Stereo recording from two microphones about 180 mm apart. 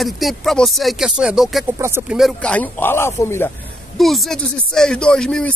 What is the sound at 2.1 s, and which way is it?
Speech, centre (ahead or behind).